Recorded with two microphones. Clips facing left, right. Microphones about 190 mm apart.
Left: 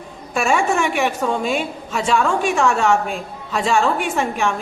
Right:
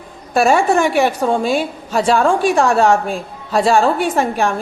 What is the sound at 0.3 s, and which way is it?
A woman's voice, 35° right (ahead or behind).